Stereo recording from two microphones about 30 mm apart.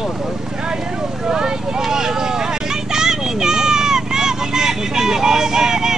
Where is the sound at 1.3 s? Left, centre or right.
Right.